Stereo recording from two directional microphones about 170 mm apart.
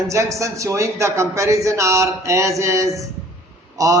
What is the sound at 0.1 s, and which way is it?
A man's voice, 20° right (ahead or behind).